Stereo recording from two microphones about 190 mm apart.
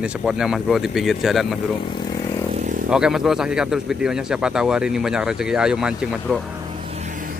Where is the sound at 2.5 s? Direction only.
40° right (ahead or behind).